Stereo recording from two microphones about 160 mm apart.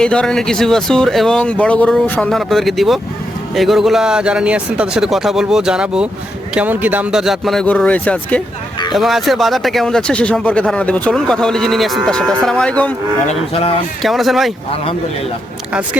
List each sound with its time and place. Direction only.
0.0 s speech: 5° left (ahead or behind)
12.5 s cattle: 5° left (ahead or behind)
13.2 s livestock: 35° left (ahead or behind)
14.0 s speech: centre (ahead or behind)